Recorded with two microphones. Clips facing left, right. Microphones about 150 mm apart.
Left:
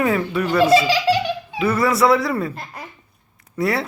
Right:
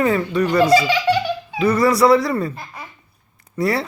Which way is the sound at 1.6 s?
5° left (ahead or behind).